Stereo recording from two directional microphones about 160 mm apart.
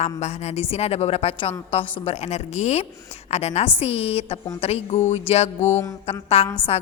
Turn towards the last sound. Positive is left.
turn(degrees=40)  # may be behind; listen again after turning